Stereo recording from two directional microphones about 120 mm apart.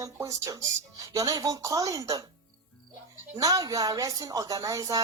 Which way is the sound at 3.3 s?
30° right (ahead or behind).